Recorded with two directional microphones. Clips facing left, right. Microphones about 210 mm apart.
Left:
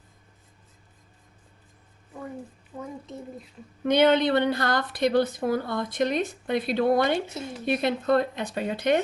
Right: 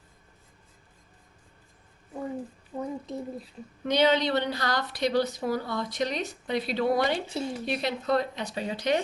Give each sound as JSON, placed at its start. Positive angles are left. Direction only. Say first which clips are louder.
{"t": 2.7, "sound": "a child's voice", "louder": "right 4 dB", "side_deg": -25}
{"t": 3.8, "sound": "a woman's voice", "louder": "left 4 dB", "side_deg": 55}